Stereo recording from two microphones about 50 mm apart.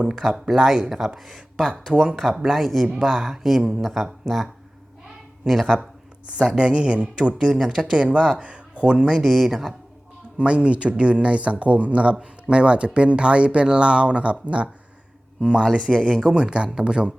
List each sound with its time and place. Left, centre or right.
0.0 s speech: centre
5.5 s speech: centre
5.8 s speech: centre
10.3 s speech: right